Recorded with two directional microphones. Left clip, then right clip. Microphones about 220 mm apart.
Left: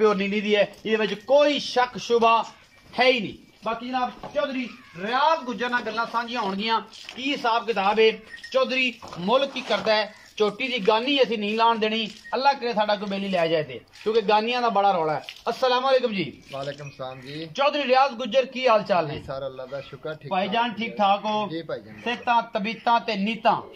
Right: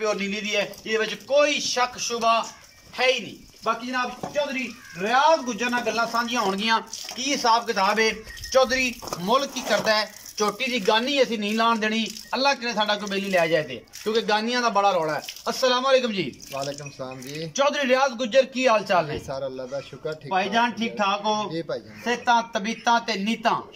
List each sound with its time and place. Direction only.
0.0 s speech: 35° left (ahead or behind)
5.6 s speech: 5° right (ahead or behind)
16.5 s speech: 5° right (ahead or behind)
22.0 s speech: 10° left (ahead or behind)